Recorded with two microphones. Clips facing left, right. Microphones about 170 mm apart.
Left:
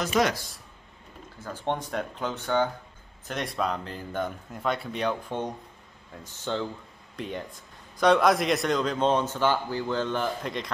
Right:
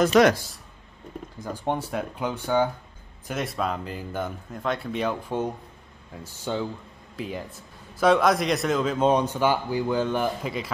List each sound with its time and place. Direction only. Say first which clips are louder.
0.1 s speech: right 3 dB; 60° right (ahead or behind)
1.4 s a man's voice: right 2 dB; 15° right (ahead or behind)